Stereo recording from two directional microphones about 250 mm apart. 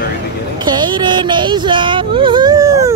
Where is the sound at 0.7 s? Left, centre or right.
Centre.